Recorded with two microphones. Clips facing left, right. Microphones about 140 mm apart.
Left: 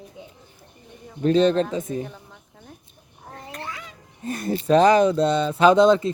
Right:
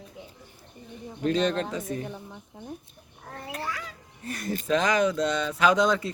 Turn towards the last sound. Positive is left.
turn(degrees=25)  # may be behind; listen again after turning